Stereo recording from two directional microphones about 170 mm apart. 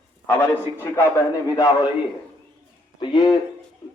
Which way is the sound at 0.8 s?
15° left (ahead or behind).